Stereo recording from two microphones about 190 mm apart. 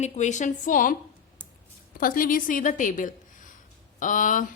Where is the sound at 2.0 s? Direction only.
50° left (ahead or behind).